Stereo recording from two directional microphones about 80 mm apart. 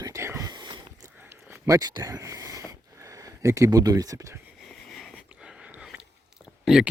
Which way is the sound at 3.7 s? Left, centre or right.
Right.